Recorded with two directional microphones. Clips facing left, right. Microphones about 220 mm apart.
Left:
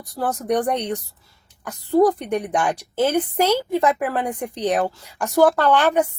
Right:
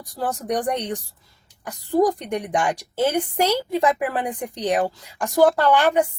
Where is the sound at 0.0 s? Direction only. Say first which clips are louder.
Left 2 dB; 10° right (ahead or behind).